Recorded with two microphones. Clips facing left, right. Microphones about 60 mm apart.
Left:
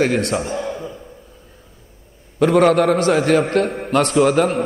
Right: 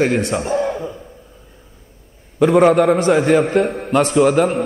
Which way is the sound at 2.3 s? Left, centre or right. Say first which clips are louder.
Right 2 dB; centre.